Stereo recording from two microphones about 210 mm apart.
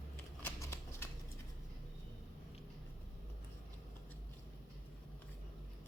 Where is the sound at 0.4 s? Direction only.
10° left (ahead or behind).